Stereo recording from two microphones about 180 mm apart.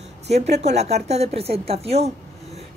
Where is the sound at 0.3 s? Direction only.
35° right (ahead or behind).